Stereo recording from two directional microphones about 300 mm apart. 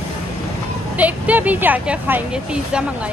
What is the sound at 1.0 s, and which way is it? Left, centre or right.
Speech, centre.